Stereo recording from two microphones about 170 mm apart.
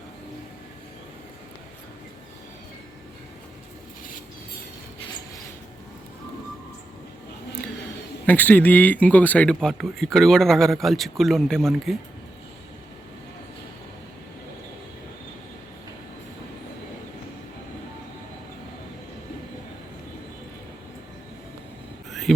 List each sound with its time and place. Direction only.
8.3 s speech: 10° left (ahead or behind)